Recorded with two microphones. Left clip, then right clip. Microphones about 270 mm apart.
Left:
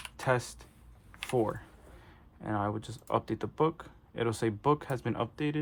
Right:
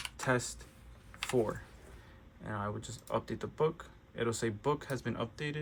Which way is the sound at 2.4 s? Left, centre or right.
Left.